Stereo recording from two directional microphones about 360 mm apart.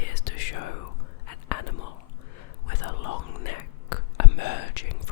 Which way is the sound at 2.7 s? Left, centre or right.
Left.